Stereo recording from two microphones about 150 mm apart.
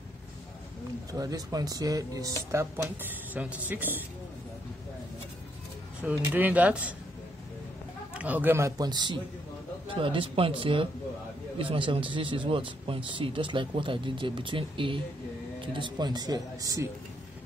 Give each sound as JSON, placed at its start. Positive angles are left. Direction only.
{"t": 1.1, "sound": "speech", "side_deg": -25}
{"t": 6.0, "sound": "speech", "side_deg": -10}
{"t": 8.1, "sound": "speech", "side_deg": -10}